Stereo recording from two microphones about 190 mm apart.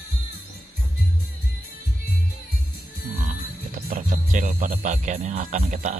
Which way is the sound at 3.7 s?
45° right (ahead or behind).